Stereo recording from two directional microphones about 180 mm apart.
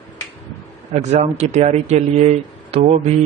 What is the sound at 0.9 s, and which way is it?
Speech, 35° right (ahead or behind).